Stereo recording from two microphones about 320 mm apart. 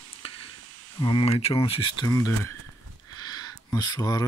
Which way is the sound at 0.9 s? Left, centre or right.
Centre.